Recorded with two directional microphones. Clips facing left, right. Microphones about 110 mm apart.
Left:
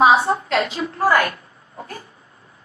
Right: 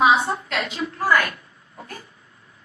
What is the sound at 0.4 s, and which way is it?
Speech, 35° left (ahead or behind).